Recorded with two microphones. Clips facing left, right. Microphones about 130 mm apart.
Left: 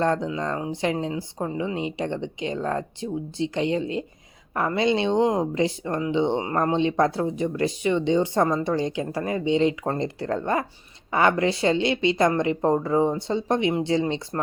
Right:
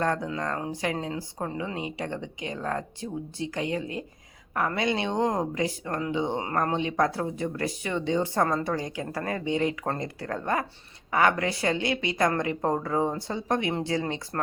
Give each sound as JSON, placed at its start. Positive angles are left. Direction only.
{"t": 0.0, "sound": "speech", "side_deg": 25}